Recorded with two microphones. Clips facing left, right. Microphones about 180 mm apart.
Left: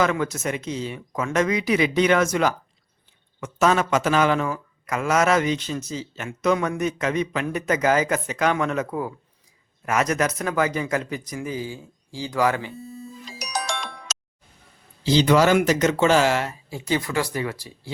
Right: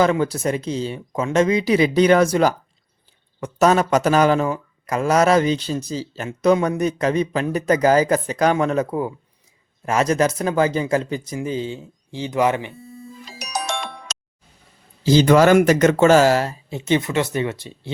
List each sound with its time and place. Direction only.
0.0 s speech: 30° right (ahead or behind)
15.0 s speech: 45° right (ahead or behind)
16.6 s speech: 25° right (ahead or behind)